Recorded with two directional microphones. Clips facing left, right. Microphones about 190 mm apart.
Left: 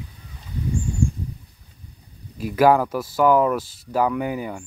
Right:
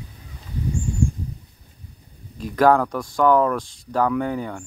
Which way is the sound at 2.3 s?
10° left (ahead or behind).